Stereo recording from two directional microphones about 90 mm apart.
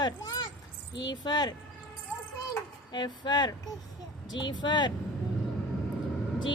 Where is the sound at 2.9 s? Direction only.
55° left (ahead or behind).